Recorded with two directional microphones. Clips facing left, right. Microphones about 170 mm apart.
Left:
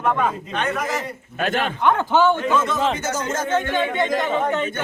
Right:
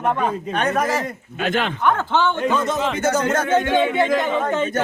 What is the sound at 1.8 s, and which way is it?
Speech, 15° left (ahead or behind).